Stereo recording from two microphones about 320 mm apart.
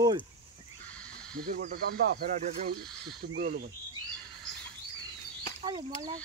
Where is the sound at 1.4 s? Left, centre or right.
Right.